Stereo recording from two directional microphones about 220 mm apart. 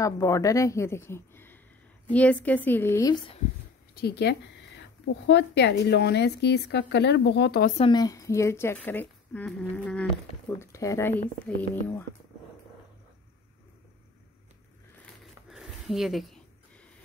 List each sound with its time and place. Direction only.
0.0 s speech: 15° left (ahead or behind)
3.9 s speech: 50° left (ahead or behind)
7.7 s speech: 20° left (ahead or behind)
15.5 s a sound: centre (ahead or behind)